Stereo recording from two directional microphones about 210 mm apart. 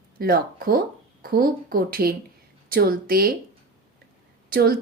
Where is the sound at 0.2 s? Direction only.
45° right (ahead or behind).